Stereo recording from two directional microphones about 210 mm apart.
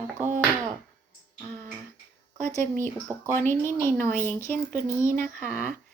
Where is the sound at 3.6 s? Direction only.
10° left (ahead or behind).